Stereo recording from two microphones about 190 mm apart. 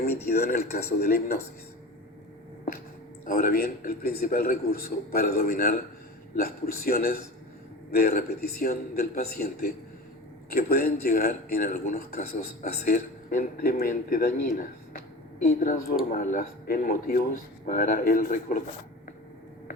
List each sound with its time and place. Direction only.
0.0 s speech: 55° left (ahead or behind)
3.2 s speech: 50° left (ahead or behind)